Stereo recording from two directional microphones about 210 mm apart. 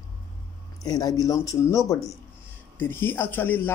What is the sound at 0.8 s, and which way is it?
Speech, 15° left (ahead or behind).